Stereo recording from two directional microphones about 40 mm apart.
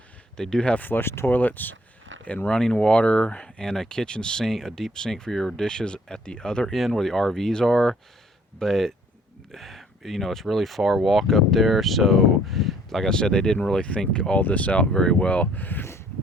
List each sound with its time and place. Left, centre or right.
0.3 s speech: centre
0.8 s speech: left
1.0 s speech: left
1.3 s speech: left
2.5 s speech: centre
2.8 s speech: left
3.6 s speech: centre
6.7 s speech: centre
13.1 s speech: centre
14.5 s speech: left
14.9 s speech: left
15.5 s speech: left